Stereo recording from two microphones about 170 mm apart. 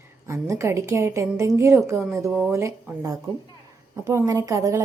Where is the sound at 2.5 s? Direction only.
15° right (ahead or behind).